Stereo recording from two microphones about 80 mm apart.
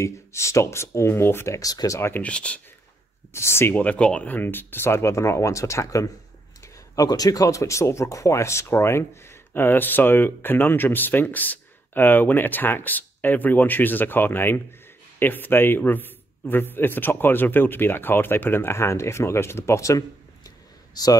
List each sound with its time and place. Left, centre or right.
0.0 s speech: left
1.6 s speech: left
2.0 s speech: left
2.2 s speech: centre
3.3 s speech: left
3.7 s speech: centre; by 21.2 s left